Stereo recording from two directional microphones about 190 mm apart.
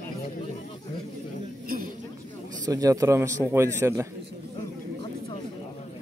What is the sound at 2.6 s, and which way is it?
A man's voice, 15° right (ahead or behind).